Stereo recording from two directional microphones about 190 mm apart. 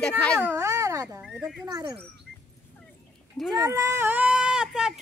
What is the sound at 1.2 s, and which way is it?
Speech, 5° right (ahead or behind).